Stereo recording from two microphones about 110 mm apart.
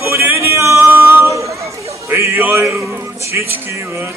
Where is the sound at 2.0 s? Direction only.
20° right (ahead or behind).